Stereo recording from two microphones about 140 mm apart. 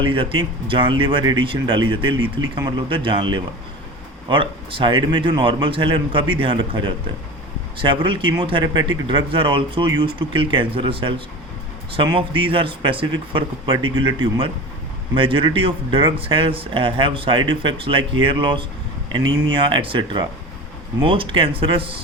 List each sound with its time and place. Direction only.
0.0 s speech: 35° right (ahead or behind)